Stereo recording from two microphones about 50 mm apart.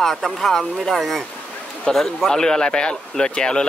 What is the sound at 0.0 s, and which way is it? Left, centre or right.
Speech, centre.